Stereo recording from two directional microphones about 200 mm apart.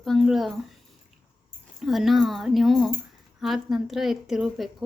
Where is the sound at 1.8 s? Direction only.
Centre (ahead or behind).